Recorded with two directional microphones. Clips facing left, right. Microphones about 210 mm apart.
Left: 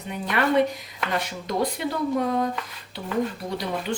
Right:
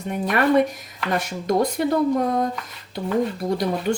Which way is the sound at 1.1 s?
45° right (ahead or behind).